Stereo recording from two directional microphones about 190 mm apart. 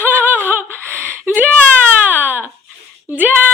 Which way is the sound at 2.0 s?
10° right (ahead or behind).